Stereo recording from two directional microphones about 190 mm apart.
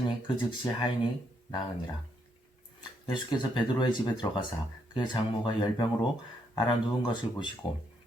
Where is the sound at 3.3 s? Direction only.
25° left (ahead or behind).